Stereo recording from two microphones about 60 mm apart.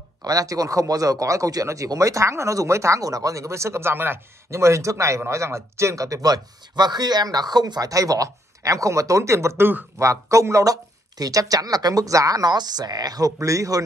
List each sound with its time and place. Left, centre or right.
0.2 s speech: right
7.0 s speech: right